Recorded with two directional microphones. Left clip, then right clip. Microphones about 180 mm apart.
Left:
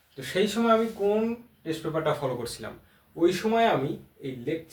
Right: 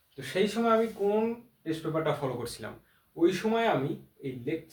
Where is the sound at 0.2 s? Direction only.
5° right (ahead or behind).